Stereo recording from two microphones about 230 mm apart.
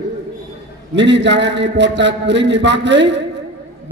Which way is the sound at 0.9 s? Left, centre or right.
Right.